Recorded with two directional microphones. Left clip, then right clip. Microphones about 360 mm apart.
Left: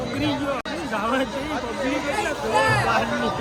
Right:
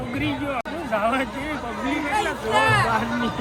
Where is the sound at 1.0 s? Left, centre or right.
Centre.